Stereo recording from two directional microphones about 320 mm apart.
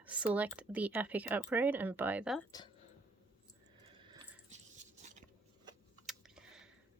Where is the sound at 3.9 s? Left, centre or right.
Centre.